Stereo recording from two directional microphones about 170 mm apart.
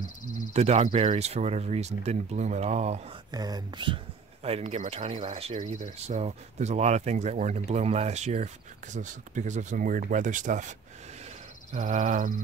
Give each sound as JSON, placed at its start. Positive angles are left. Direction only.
{"t": 0.5, "sound": "speech", "side_deg": -40}
{"t": 3.3, "sound": "speech", "side_deg": -25}
{"t": 11.7, "sound": "speech", "side_deg": -45}